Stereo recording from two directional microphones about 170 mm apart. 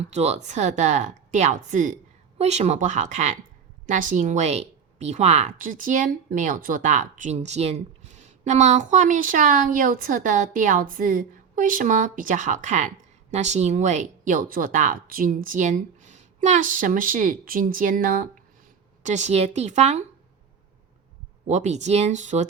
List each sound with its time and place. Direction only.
0.1 s a woman's voice: 40° right (ahead or behind)
19.0 s a woman's voice: 45° right (ahead or behind)
21.4 s a woman's voice: 40° right (ahead or behind)